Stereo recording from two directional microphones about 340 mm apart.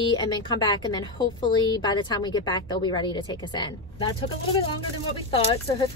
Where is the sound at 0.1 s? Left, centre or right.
Centre.